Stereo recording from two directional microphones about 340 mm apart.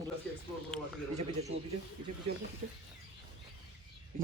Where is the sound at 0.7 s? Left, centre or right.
Centre.